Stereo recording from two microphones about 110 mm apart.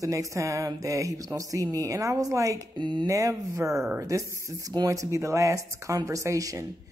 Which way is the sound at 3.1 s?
30° right (ahead or behind).